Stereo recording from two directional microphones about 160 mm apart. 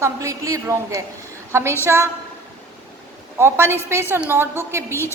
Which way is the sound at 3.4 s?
15° right (ahead or behind).